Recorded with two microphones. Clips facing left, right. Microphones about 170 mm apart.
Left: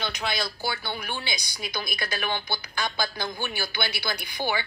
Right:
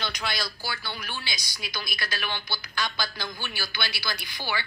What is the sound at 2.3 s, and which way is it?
A woman's voice, 50° left (ahead or behind).